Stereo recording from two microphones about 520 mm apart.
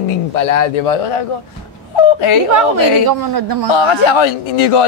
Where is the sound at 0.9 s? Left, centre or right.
Left.